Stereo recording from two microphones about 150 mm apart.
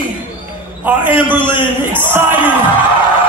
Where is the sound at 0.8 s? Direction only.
10° right (ahead or behind).